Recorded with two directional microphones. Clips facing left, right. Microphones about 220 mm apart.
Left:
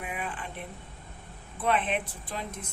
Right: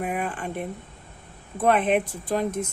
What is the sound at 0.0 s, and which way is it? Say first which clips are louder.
Speech: right 8 dB; 50° right (ahead or behind).